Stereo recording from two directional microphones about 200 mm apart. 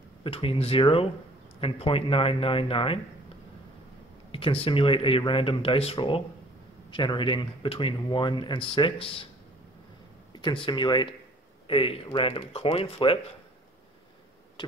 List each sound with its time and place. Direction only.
0.2 s speech: 25° left (ahead or behind)
4.3 s speech: 30° left (ahead or behind)
10.3 s speech: 25° left (ahead or behind)
14.6 s tick-tock: 25° left (ahead or behind)